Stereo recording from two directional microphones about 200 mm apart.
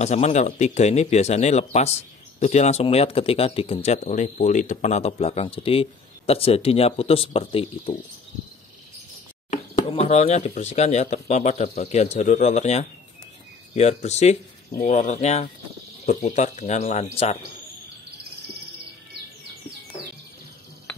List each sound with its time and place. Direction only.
0.0 s speech: 35° left (ahead or behind)
9.5 s speech: 35° left (ahead or behind)